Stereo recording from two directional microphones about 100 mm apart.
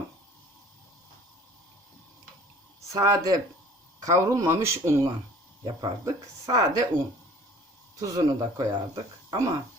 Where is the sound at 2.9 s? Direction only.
35° right (ahead or behind).